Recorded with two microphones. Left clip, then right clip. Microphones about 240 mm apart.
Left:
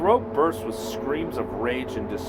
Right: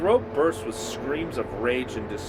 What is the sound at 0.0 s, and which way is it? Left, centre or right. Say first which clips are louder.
Speech: left 1 dB; left.